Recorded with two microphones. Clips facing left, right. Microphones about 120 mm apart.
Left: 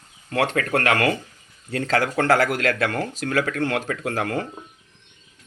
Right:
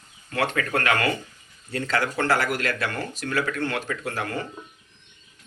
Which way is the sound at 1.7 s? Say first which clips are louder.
Left 4 dB; 90° left.